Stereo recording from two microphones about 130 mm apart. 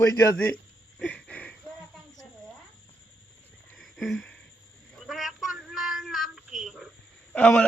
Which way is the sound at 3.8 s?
Centre (ahead or behind).